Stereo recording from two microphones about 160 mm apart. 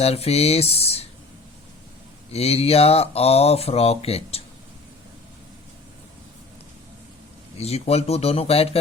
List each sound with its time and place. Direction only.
0.0 s speech: 40° left (ahead or behind)
2.3 s speech: 40° left (ahead or behind)
7.6 s speech: 40° left (ahead or behind)